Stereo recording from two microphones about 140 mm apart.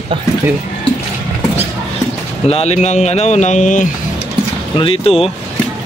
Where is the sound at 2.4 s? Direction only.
50° left (ahead or behind).